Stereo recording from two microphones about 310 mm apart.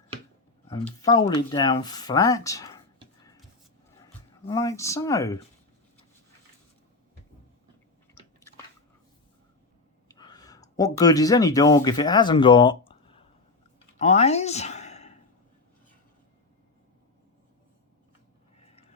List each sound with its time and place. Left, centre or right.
0.9 s speech: centre
4.4 s speech: centre
8.1 s chewing: centre
10.1 s speech: centre
18.6 s a sound: centre